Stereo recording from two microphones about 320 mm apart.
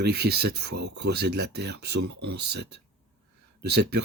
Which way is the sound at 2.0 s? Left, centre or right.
Right.